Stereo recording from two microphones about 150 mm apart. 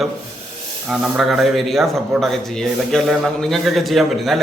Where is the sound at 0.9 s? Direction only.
5° right (ahead or behind).